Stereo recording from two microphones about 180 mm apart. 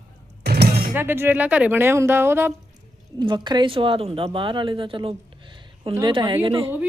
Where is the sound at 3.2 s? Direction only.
25° right (ahead or behind).